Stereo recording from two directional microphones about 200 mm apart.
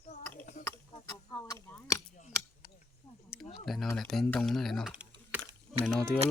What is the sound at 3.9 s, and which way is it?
Typing, centre (ahead or behind).